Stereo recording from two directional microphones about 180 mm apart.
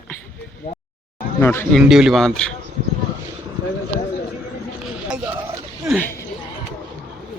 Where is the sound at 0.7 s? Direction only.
45° left (ahead or behind).